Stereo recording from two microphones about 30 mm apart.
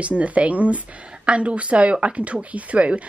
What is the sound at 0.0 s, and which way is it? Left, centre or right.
A woman's voice, right.